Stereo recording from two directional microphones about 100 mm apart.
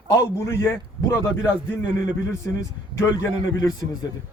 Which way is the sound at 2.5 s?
25° left (ahead or behind).